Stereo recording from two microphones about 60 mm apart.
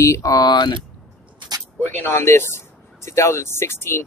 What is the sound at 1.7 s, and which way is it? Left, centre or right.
Speech, left.